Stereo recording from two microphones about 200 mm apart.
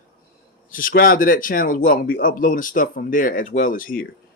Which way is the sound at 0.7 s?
45° left (ahead or behind).